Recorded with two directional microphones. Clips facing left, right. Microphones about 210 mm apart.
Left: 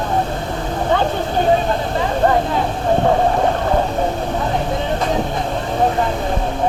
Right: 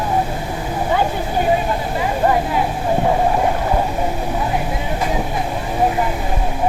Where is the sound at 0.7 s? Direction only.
5° right (ahead or behind).